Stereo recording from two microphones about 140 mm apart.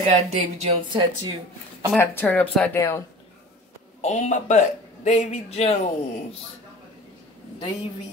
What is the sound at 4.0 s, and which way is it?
A man's voice, 55° left (ahead or behind).